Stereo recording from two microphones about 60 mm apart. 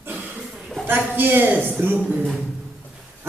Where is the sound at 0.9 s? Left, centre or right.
Right.